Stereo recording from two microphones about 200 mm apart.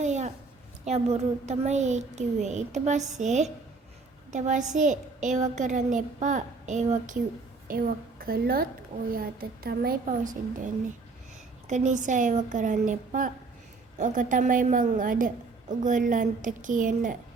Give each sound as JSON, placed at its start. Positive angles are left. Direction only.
{"t": 0.0, "sound": "a sound", "side_deg": -35}
{"t": 0.9, "sound": "a woman's voice", "side_deg": -35}
{"t": 11.7, "sound": "a woman's voice", "side_deg": -35}